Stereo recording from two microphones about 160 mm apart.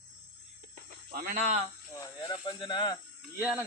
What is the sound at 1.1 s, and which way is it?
Speech, 60° right (ahead or behind).